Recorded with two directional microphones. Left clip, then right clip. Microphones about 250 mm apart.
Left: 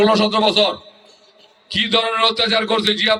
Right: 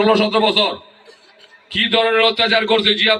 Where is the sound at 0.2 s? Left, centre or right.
Left.